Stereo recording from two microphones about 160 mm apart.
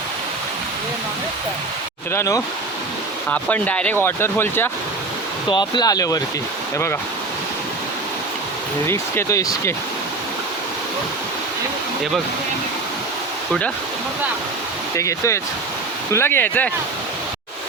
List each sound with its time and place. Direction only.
2.1 s speech: 20° left (ahead or behind)
3.2 s speech: 10° left (ahead or behind)
5.5 s speech: 30° left (ahead or behind)
8.9 s speech: 15° left (ahead or behind)
14.9 s speech: 20° left (ahead or behind)